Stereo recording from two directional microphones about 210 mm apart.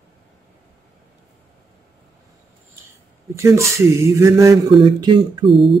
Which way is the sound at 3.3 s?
15° right (ahead or behind).